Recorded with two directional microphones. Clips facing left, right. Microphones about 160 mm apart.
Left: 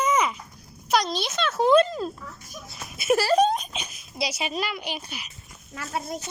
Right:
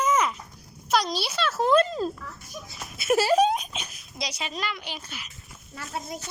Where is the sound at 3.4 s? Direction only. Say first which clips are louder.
Left 1 dB; 5° right (ahead or behind).